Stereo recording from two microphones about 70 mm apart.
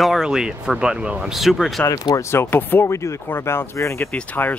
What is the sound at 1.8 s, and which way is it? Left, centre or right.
Speech, left.